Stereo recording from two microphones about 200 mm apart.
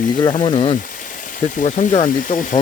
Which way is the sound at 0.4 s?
25° left (ahead or behind).